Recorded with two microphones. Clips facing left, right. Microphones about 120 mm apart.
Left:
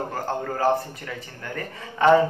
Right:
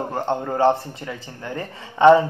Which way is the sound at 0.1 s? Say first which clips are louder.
Right 4 dB; 25° right (ahead or behind).